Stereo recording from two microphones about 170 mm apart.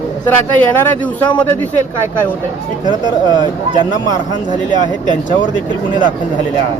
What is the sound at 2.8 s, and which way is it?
Speech, 25° right (ahead or behind).